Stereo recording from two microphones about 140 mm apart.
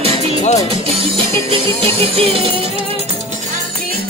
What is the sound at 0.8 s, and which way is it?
Music, 40° right (ahead or behind).